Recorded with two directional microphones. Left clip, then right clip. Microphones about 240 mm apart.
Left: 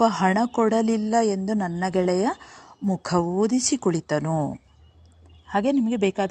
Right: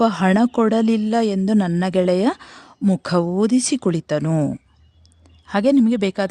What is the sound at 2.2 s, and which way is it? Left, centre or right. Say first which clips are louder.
Speech: right 4 dB; right.